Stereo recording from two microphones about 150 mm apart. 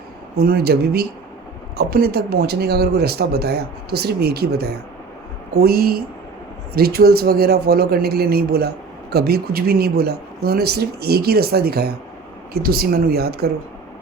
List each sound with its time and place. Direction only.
0.3 s speech: 90° right